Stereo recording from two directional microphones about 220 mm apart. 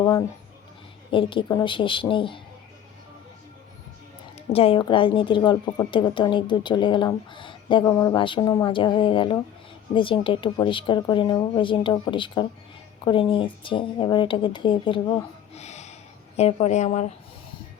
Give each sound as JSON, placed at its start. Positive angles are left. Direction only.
{"t": 0.0, "sound": "a woman's voice", "side_deg": 15}
{"t": 4.4, "sound": "a woman's voice", "side_deg": 25}
{"t": 15.5, "sound": "a sound", "side_deg": 30}
{"t": 16.4, "sound": "a woman's voice", "side_deg": 30}